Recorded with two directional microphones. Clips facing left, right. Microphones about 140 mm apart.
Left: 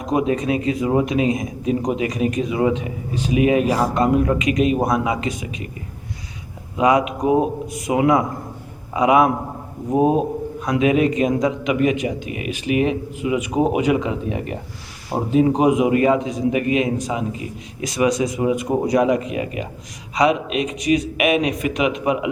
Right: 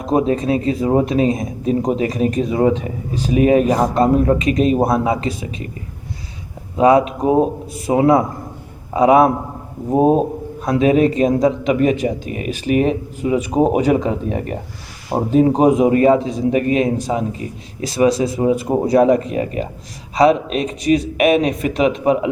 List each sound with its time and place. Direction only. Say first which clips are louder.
0.0 s speech: right 3 dB; 35° right (ahead or behind)
6.7 s speech: right 4 dB; 35° right (ahead or behind)